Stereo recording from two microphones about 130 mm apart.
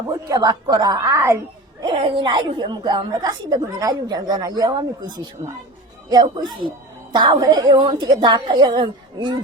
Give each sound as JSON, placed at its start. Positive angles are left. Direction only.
{"t": 0.3, "sound": "a woman's voice", "side_deg": -30}
{"t": 1.8, "sound": "a woman's voice", "side_deg": -45}